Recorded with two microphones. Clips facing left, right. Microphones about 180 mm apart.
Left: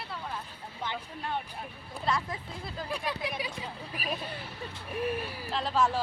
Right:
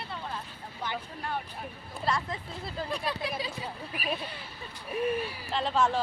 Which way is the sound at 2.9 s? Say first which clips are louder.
Even; 15° left (ahead or behind).